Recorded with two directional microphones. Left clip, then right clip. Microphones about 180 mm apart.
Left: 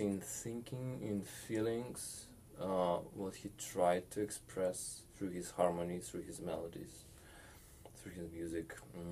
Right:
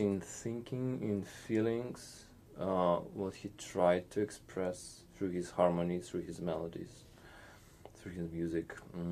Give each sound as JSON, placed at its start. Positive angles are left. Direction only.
{"t": 0.0, "sound": "speech", "side_deg": -20}
{"t": 8.0, "sound": "speech", "side_deg": -25}